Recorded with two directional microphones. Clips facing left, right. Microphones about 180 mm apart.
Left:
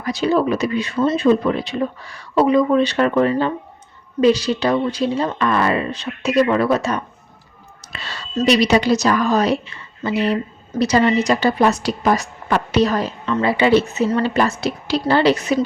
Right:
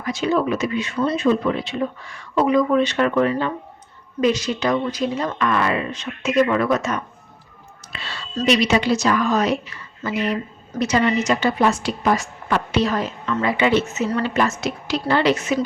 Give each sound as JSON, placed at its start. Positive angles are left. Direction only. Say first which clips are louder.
{"t": 0.0, "sound": "speech", "louder": "left 3 dB", "side_deg": 35}
{"t": 7.9, "sound": "whispering", "louder": "left 1 dB", "side_deg": 40}
{"t": 8.4, "sound": "speech", "louder": "left 3 dB", "side_deg": 35}